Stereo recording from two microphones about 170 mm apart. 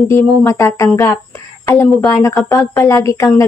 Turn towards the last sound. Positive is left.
turn(degrees=15)  # may be behind; listen again after turning